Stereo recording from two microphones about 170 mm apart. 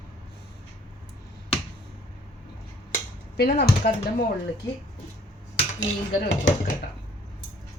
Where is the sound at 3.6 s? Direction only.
75° left (ahead or behind).